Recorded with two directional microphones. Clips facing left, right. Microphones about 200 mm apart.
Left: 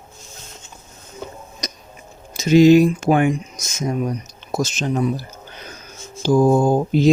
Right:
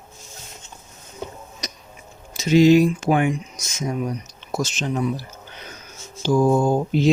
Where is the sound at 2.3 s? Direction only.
45° left (ahead or behind).